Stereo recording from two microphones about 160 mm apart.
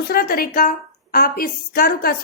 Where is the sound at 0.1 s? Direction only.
70° left (ahead or behind).